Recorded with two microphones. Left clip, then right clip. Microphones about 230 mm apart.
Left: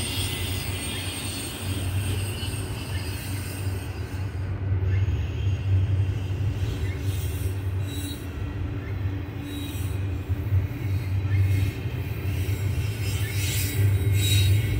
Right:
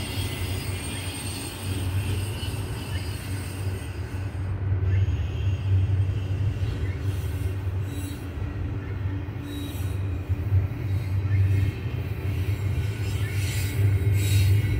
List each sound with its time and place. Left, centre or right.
0.0 s vehicle: left
13.4 s music: left